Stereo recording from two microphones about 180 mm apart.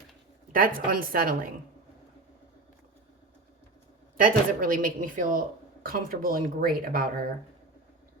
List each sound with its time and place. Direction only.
0.5 s speech: 50° right (ahead or behind)
4.2 s speech: 50° right (ahead or behind)